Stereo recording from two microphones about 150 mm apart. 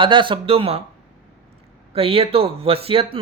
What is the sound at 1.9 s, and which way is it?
Speech, 40° right (ahead or behind).